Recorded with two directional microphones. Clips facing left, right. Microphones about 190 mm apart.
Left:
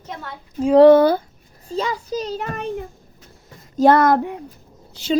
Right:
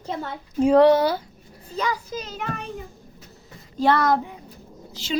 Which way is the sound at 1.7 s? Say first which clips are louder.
Left 4 dB; 30° left (ahead or behind).